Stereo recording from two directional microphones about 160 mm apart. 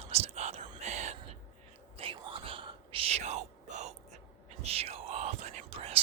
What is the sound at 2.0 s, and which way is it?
Whispering, 35° right (ahead or behind).